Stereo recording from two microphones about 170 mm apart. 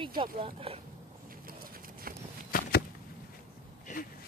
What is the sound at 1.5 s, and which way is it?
Horse, 60° right (ahead or behind).